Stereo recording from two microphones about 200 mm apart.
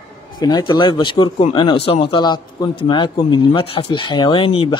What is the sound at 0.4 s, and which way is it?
Speech, 20° left (ahead or behind).